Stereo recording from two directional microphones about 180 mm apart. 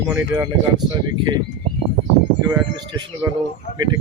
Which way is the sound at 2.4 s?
25° right (ahead or behind).